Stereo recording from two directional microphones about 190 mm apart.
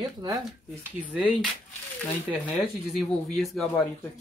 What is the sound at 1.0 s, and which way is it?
Speech, 5° right (ahead or behind).